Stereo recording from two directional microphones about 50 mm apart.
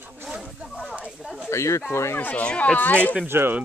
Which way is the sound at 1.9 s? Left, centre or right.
Left.